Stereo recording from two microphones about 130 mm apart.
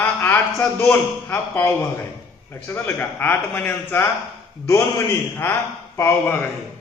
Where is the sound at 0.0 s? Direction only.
15° left (ahead or behind).